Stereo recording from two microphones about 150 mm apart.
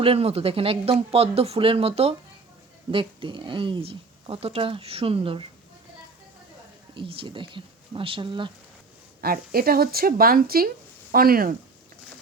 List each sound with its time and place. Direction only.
0.0 s speech: 40° right (ahead or behind)
6.9 s speech: 35° right (ahead or behind)
9.2 s speech: 90° right; by 11.5 s 75° right (ahead or behind)